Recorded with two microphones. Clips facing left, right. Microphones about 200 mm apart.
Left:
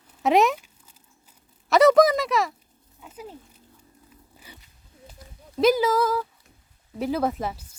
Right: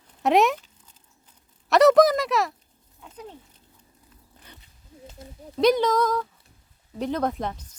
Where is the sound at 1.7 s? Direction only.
Centre (ahead or behind).